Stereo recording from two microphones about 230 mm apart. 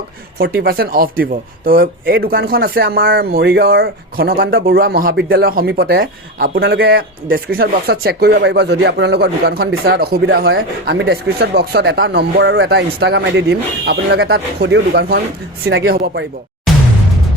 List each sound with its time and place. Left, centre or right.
0.3 s speech: right